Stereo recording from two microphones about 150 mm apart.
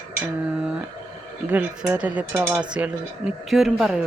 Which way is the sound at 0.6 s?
5° right (ahead or behind).